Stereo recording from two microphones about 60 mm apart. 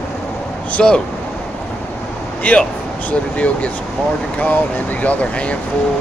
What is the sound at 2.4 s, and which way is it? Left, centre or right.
Speech, left.